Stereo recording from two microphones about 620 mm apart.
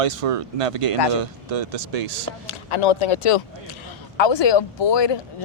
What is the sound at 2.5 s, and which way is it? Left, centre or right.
Speech, left.